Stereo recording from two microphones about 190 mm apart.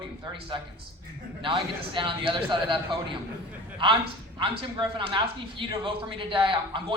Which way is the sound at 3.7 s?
25° right (ahead or behind).